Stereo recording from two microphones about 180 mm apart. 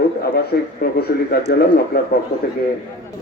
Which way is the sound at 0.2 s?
60° left (ahead or behind).